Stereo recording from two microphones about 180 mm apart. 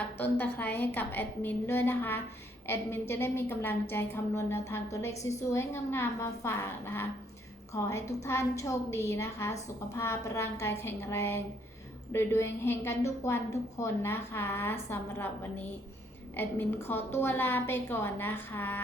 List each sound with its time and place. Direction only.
0.2 s a woman's voice: 10° left (ahead or behind)
16.3 s a woman's voice: 10° left (ahead or behind)